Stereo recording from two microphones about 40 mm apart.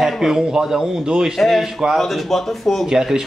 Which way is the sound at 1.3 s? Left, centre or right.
Centre.